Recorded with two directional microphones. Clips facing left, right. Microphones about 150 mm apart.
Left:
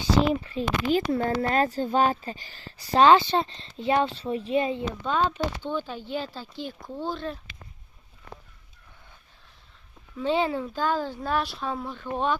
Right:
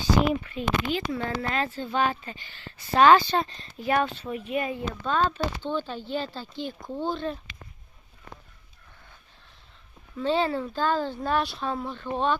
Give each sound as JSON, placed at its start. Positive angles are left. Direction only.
{"t": 0.0, "sound": "speech", "side_deg": 30}
{"t": 3.1, "sound": "speech", "side_deg": 25}
{"t": 10.2, "sound": "speech", "side_deg": 15}